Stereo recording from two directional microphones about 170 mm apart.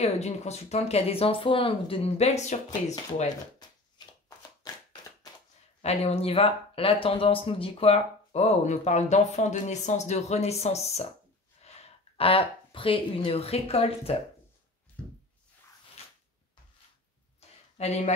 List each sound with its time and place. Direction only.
0.0 s speech: 40° left (ahead or behind)
5.8 s speech: 40° left (ahead or behind)
17.4 s a sound: 40° left (ahead or behind)